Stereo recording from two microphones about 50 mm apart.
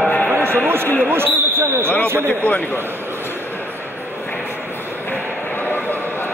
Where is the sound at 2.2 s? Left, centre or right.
Left.